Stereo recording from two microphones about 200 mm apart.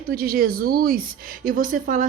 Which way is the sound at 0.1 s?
45° right (ahead or behind).